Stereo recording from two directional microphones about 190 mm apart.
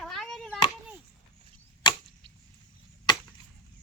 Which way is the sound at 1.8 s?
25° left (ahead or behind).